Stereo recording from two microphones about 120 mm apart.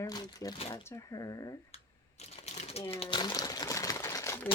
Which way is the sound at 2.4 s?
70° left (ahead or behind).